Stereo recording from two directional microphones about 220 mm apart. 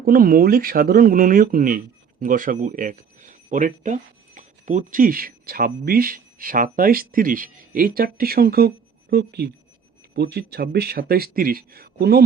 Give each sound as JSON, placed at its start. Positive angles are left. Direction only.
{"t": 0.0, "sound": "speech", "side_deg": -40}